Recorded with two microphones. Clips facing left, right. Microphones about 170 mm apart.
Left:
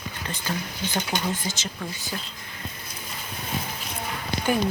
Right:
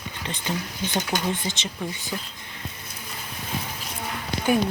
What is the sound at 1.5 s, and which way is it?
Speech, 20° right (ahead or behind).